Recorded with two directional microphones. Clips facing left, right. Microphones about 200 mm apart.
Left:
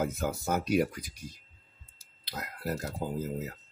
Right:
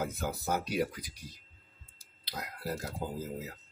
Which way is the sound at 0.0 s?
50° left (ahead or behind).